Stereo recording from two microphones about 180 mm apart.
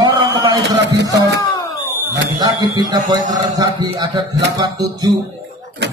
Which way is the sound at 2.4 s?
20° right (ahead or behind).